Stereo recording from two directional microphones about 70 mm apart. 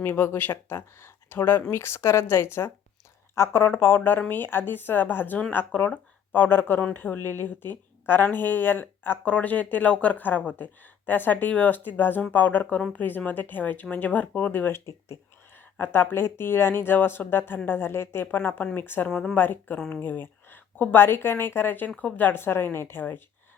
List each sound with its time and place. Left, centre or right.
0.0 s speech: left
15.8 s speech: left